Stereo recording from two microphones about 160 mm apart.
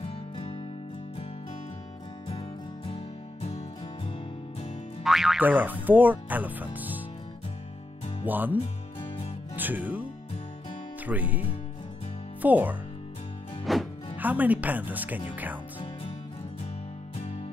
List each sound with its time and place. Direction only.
0.1 s music: 30° left (ahead or behind)
2.9 s music: 40° left (ahead or behind)
5.0 s speech: centre (ahead or behind)
8.3 s speech: 10° right (ahead or behind)
9.6 s speech: 10° right (ahead or behind)
11.1 s speech: 10° right (ahead or behind)
13.7 s music: centre (ahead or behind)
14.1 s speech: 10° right (ahead or behind)